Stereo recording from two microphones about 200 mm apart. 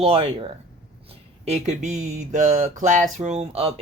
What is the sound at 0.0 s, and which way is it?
A man's voice, 30° right (ahead or behind).